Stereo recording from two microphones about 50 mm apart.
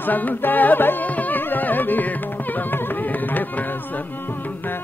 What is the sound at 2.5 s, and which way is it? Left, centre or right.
Music, left.